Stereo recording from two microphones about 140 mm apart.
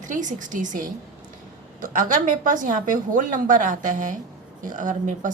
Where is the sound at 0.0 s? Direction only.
65° right (ahead or behind).